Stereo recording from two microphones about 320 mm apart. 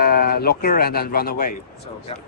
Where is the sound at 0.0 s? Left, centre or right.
Left.